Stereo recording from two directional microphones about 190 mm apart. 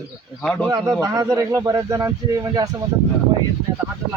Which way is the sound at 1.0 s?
20° right (ahead or behind).